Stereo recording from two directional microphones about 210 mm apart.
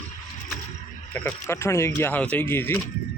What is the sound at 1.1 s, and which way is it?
Speech, 10° left (ahead or behind).